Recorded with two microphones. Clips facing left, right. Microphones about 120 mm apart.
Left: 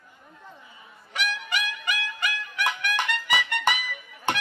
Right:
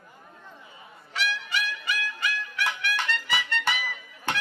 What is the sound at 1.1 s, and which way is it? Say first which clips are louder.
Music: left 1 dB; 15° left (ahead or behind).